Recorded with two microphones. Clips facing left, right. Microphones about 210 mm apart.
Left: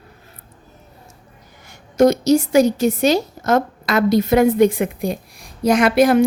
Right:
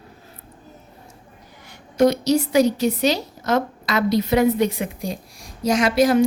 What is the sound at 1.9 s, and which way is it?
A woman's voice, 45° left (ahead or behind).